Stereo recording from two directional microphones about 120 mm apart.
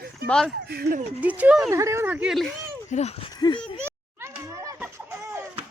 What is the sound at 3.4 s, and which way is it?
Speech, 40° left (ahead or behind).